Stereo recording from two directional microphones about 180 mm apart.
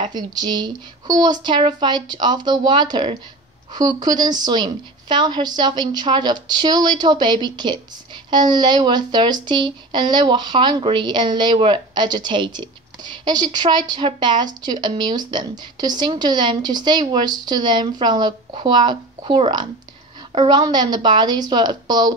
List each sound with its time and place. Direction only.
0.0 s speech: 20° right (ahead or behind)